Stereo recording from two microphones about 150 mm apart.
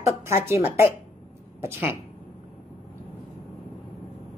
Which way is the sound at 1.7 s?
15° right (ahead or behind).